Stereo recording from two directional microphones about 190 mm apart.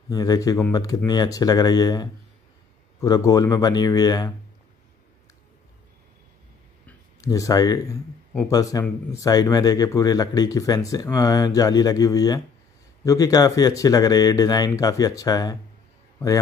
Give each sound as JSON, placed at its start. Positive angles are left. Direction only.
{"t": 0.1, "sound": "speech", "side_deg": 20}
{"t": 7.2, "sound": "speech", "side_deg": 20}